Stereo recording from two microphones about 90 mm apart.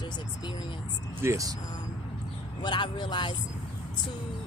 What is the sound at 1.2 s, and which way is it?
Speech, 35° right (ahead or behind).